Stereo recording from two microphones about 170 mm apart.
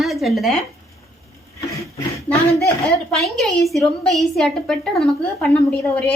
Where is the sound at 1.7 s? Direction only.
20° left (ahead or behind).